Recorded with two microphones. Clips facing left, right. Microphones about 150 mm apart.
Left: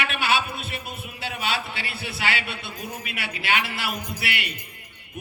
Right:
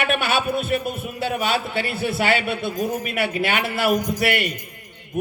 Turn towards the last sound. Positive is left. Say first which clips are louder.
# right 13 dB
turn(degrees=-45)  # may be behind; listen again after turning